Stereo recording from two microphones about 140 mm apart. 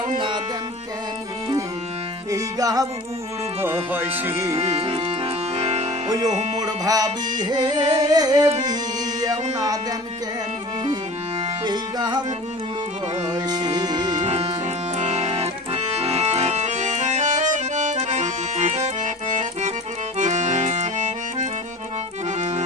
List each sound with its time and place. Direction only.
0.1 s music: 35° right (ahead or behind)
2.3 s music: 25° right (ahead or behind)
3.9 s music: 15° right (ahead or behind)
4.5 s accordion: 45° right (ahead or behind)
6.1 s music: 30° right (ahead or behind)
11.6 s music: 30° right (ahead or behind)
13.2 s music: 30° right (ahead or behind)
14.2 s music: 50° right (ahead or behind)
14.9 s accordion: 50° right (ahead or behind)